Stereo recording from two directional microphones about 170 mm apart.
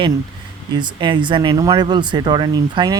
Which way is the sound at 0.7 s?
25° right (ahead or behind).